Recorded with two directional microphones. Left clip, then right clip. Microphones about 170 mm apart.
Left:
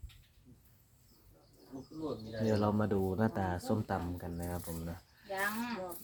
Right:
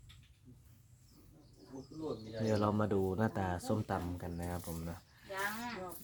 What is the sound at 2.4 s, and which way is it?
Speech, 15° right (ahead or behind).